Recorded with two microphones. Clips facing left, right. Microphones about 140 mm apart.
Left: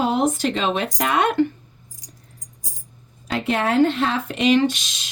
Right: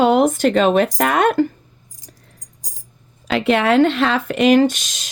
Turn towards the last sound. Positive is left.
turn(degrees=-45)  # may be behind; listen again after turning